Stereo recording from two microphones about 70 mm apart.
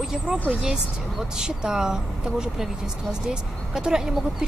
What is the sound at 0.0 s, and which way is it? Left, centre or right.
Speech, centre.